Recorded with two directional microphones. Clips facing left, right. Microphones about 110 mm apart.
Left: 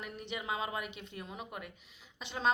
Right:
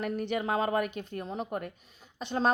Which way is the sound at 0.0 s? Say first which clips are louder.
Right 10 dB; 50° right (ahead or behind).